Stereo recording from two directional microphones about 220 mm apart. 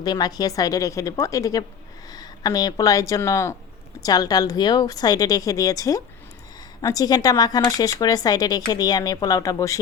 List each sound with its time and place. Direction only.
0.0 s speech: 20° left (ahead or behind)